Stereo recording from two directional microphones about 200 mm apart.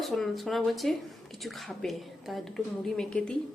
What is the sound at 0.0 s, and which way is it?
Speech, centre (ahead or behind).